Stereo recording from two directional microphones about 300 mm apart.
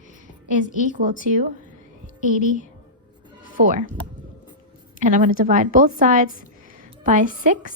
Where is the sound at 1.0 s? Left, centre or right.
Right.